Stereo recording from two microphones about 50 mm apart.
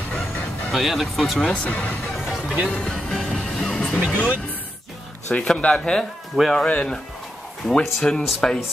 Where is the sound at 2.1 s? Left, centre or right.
Centre.